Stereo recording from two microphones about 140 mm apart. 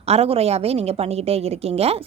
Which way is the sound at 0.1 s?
45° right (ahead or behind).